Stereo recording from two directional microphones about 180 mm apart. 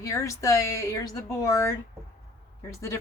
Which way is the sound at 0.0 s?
15° left (ahead or behind).